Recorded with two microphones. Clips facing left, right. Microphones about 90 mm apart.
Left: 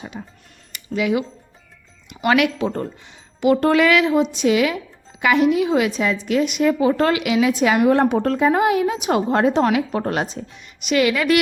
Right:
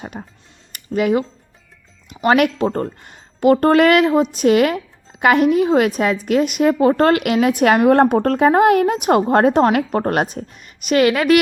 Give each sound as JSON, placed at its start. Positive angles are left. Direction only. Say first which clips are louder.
{"t": 0.0, "sound": "a woman's voice", "louder": "right 2 dB", "side_deg": -40}
{"t": 0.7, "sound": "a sound", "louder": "right 3 dB", "side_deg": -45}
{"t": 2.2, "sound": "a woman's voice", "louder": "right 3 dB", "side_deg": -45}